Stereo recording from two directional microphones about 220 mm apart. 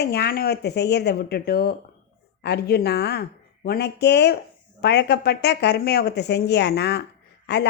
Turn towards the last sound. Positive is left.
turn(degrees=50)  # may be behind; listen again after turning